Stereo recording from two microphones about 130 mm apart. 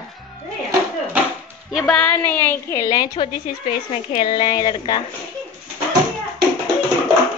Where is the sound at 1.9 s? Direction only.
10° left (ahead or behind); by 3.3 s 30° left (ahead or behind).